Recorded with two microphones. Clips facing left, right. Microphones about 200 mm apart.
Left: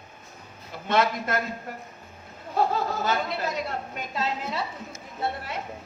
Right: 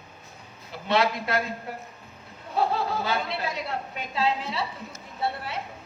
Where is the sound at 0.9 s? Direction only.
45° left (ahead or behind).